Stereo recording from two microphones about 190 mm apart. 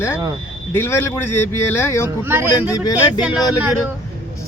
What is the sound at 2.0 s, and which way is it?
Speech, 10° right (ahead or behind).